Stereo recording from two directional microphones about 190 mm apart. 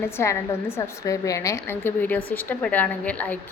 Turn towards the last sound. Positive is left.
turn(degrees=10)  # may be behind; listen again after turning